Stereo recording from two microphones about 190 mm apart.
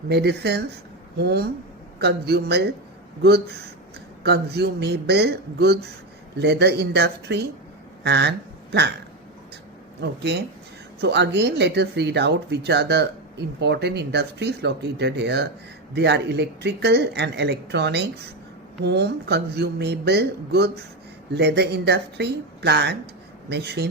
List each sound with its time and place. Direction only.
0.1 s speech: 60° right (ahead or behind)
10.0 s speech: 60° right (ahead or behind)